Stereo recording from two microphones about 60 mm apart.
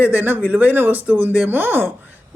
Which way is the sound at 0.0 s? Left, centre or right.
Right.